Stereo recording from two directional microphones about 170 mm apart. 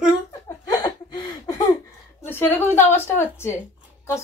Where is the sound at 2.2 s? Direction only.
15° left (ahead or behind).